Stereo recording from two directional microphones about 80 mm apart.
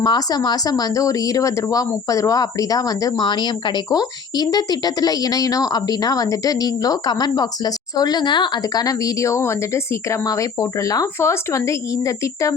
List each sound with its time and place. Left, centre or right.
0.0 s a woman's voice: left
3.2 s a woman's voice: left